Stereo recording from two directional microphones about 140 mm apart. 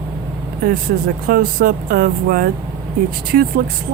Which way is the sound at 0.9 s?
90° right.